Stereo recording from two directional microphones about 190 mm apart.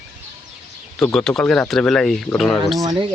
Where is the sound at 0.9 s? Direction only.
10° left (ahead or behind).